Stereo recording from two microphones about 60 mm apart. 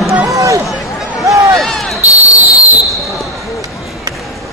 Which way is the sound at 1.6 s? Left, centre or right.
Centre.